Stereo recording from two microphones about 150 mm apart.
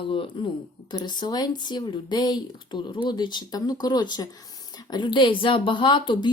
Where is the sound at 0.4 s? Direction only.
35° left (ahead or behind).